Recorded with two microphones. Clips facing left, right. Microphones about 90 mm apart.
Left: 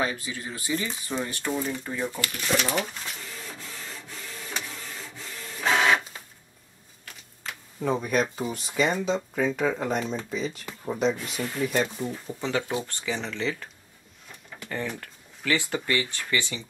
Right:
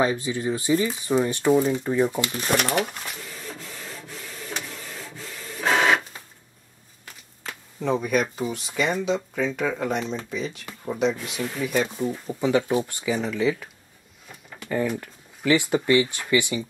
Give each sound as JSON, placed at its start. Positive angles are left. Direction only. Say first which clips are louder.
{"t": 0.0, "sound": "speech", "louder": "right 7 dB", "side_deg": -25}
{"t": 2.5, "sound": "speech", "louder": "right 3 dB", "side_deg": -60}
{"t": 3.4, "sound": "printer", "louder": "right 3 dB", "side_deg": 0}
{"t": 7.8, "sound": "speech", "louder": "right 2 dB", "side_deg": 0}
{"t": 12.3, "sound": "speech", "louder": "right 7 dB", "side_deg": -15}
{"t": 14.7, "sound": "speech", "louder": "right 7 dB", "side_deg": -10}